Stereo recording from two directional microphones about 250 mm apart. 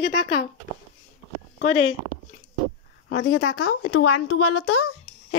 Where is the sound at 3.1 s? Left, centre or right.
Left.